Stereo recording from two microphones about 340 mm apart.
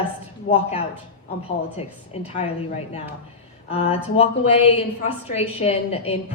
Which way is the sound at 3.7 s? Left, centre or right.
Centre.